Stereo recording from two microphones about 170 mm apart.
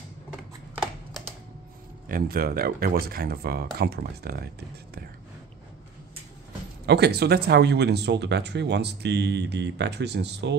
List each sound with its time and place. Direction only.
2.0 s speech: 60° right (ahead or behind)
6.9 s speech: 75° right (ahead or behind)